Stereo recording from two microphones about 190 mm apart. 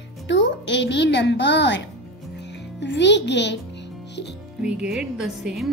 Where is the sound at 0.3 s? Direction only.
70° left (ahead or behind).